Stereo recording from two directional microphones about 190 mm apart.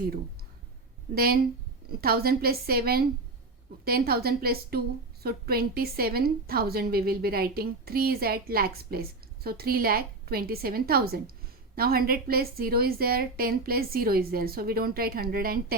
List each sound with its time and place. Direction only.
1.1 s a woman's voice: 50° right (ahead or behind)